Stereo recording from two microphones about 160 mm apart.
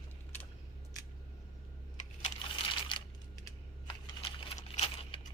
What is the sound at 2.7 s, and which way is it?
Typing, 30° left (ahead or behind).